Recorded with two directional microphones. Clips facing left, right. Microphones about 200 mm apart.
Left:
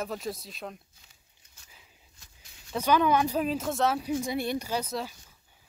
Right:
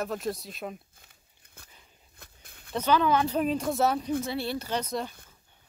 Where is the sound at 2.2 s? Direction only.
55° right (ahead or behind).